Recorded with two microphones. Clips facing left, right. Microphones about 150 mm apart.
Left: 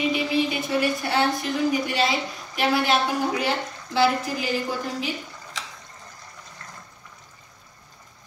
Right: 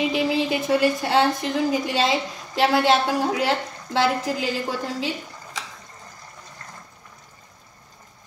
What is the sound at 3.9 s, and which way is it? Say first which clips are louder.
Speech: even; 90° right.